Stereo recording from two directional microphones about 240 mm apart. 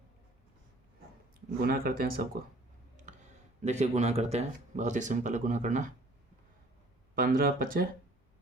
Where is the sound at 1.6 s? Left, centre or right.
Right.